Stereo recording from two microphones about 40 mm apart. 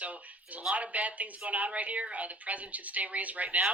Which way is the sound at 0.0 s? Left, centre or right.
Right.